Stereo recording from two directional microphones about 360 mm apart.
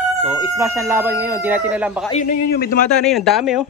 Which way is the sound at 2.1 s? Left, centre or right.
Left.